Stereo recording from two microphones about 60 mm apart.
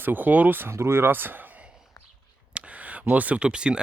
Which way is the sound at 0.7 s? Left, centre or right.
Right.